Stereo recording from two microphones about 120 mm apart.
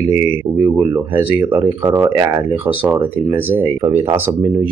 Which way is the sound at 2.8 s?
15° right (ahead or behind).